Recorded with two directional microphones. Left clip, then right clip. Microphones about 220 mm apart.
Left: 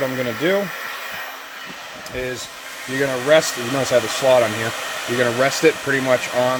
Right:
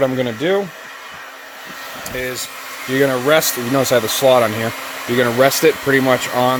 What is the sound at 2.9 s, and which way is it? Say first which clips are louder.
Speech: right 2 dB; 45° right (ahead or behind).